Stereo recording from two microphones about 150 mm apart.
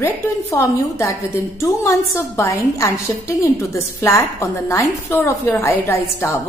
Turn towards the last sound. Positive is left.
turn(degrees=20)  # may be behind; listen again after turning